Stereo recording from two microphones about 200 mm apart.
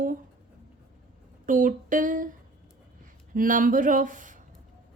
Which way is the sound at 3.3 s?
40° right (ahead or behind).